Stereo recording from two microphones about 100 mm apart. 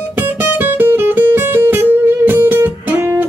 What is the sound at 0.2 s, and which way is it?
Music, 20° right (ahead or behind).